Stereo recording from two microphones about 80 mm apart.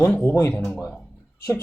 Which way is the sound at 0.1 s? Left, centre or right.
Left.